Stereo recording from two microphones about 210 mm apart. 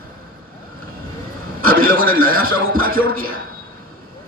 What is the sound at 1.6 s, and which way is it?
A man's voice, 45° right (ahead or behind).